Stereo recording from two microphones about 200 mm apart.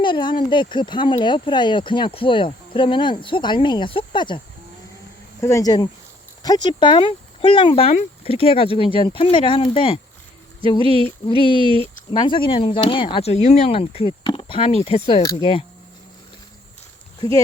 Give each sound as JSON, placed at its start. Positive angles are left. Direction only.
{"t": 0.0, "sound": "speech", "side_deg": 25}
{"t": 5.4, "sound": "speech", "side_deg": 15}
{"t": 11.3, "sound": "speech", "side_deg": 25}
{"t": 15.2, "sound": "speech", "side_deg": 15}
{"t": 17.2, "sound": "speech", "side_deg": 15}